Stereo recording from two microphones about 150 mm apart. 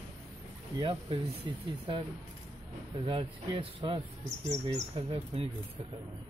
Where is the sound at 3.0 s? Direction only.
35° right (ahead or behind).